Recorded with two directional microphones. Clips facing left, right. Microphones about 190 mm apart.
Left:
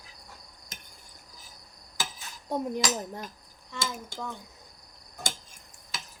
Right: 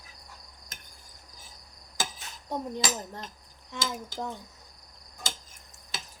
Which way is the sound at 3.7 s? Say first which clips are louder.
Right 1 dB; 15° right (ahead or behind).